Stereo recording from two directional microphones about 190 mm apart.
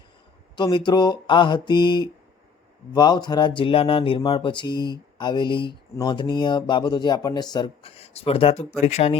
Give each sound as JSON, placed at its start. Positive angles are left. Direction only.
{"t": 0.5, "sound": "speech", "side_deg": 25}